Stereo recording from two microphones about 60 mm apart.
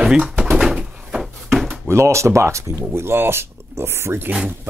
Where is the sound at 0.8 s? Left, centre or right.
Centre.